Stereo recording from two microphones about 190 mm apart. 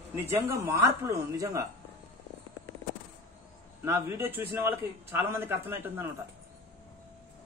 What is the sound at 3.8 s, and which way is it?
A man's voice, 15° right (ahead or behind).